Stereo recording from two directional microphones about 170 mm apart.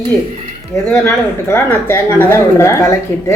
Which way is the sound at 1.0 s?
15° left (ahead or behind).